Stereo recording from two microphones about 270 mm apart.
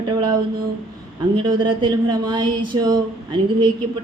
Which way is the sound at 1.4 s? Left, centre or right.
Centre.